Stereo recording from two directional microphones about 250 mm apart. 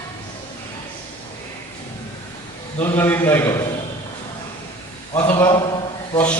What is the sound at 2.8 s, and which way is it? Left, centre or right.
Speech, centre.